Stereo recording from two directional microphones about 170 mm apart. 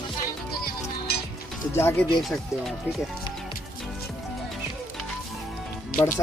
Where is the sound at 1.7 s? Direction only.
15° left (ahead or behind).